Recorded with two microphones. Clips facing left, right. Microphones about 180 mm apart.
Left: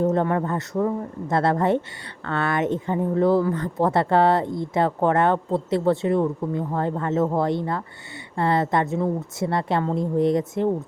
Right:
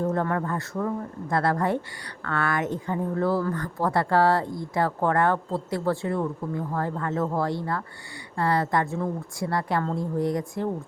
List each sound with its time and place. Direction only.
0.0 s speech: 20° left (ahead or behind)